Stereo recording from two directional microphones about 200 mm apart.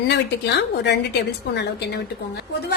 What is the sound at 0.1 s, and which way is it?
A woman's voice, 60° left (ahead or behind).